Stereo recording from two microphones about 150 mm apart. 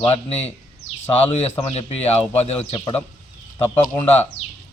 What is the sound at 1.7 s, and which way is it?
Speech, 45° left (ahead or behind).